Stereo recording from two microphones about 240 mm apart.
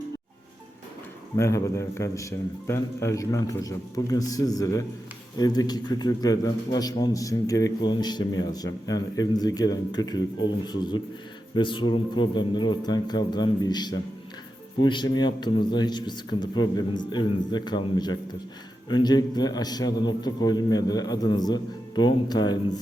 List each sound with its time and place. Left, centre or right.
1.4 s a man's voice: centre